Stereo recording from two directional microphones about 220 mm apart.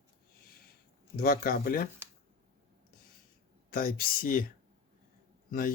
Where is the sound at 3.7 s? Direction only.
40° left (ahead or behind).